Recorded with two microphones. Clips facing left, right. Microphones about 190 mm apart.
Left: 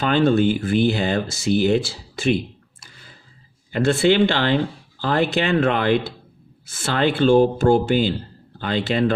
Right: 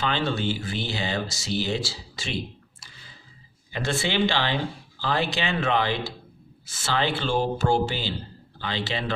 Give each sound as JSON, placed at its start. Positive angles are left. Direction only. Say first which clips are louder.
{"t": 0.0, "sound": "speech", "louder": "left 9 dB", "side_deg": 50}
{"t": 3.7, "sound": "speech", "louder": "left 10 dB", "side_deg": 55}